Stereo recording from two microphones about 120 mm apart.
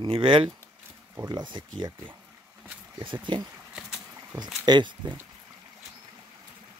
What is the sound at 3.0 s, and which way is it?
Speech, 40° right (ahead or behind).